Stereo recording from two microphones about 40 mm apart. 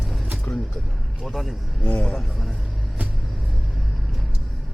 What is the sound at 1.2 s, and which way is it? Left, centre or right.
Speech, centre.